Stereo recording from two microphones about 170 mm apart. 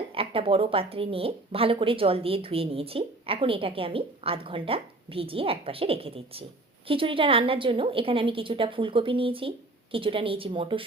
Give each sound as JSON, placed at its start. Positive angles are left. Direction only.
{"t": 0.1, "sound": "a woman's voice", "side_deg": -35}